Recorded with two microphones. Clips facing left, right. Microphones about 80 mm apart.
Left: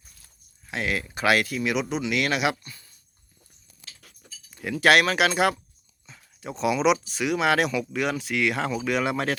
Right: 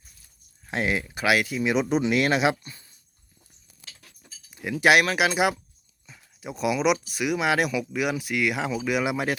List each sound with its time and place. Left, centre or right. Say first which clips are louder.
0.7 s speech: right 2 dB; right
1.0 s speech: left 1 dB; centre
1.7 s speech: right 6 dB; right
4.5 s speech: even; centre
6.1 s a sound: left 1 dB; centre
7.1 s speech: left 1 dB; centre